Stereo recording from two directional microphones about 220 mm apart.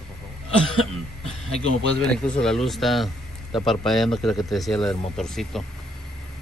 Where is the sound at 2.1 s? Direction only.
5° left (ahead or behind).